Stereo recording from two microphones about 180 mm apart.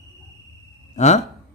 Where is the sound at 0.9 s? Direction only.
40° left (ahead or behind).